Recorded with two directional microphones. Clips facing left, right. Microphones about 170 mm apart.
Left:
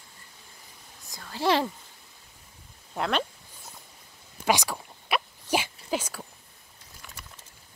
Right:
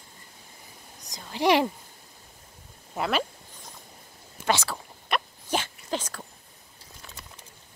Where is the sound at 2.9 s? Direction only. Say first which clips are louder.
Right 1 dB; 5° right (ahead or behind).